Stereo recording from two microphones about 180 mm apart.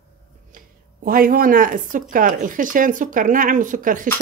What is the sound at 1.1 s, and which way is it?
Speech, 50° right (ahead or behind).